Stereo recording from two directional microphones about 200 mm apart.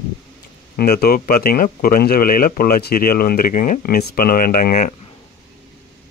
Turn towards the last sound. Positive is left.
turn(degrees=45)  # may be behind; listen again after turning